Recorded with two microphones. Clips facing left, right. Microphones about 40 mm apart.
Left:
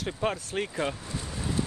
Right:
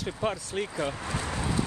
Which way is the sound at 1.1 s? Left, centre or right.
Right.